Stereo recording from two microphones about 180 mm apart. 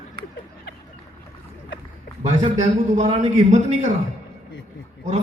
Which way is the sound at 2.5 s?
40° right (ahead or behind).